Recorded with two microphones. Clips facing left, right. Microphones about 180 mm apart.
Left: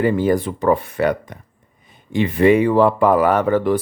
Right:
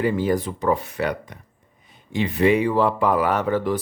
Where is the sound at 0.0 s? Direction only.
55° left (ahead or behind).